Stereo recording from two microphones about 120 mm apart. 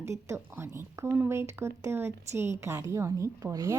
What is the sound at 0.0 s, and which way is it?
A woman's voice, 25° right (ahead or behind).